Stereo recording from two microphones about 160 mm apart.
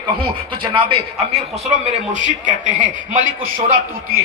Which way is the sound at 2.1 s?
50° right (ahead or behind).